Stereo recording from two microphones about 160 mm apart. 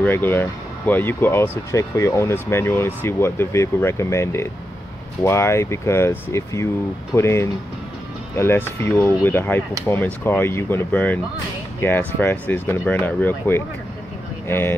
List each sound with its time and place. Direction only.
0.0 s speech: 15° left (ahead or behind)